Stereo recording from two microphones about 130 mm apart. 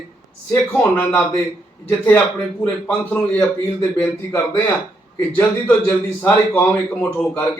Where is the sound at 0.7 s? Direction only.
15° left (ahead or behind).